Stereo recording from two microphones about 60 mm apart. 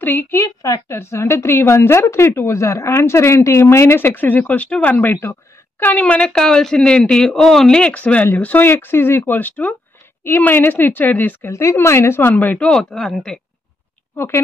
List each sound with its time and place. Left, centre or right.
0.0 s a woman's voice: left
0.3 s a woman's voice: left
0.9 s a woman's voice: left
8.6 s speech: left
11.5 s a woman's voice: left
12.5 s speech: centre
14.1 s speech: left